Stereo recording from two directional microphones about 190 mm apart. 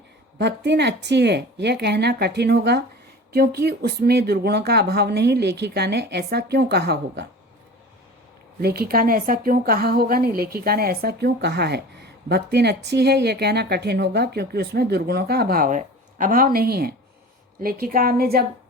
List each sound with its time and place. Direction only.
0.3 s speech: 65° right (ahead or behind)
8.6 s a woman's voice: 55° right (ahead or behind)